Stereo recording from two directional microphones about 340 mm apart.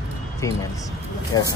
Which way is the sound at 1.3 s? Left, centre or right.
Centre.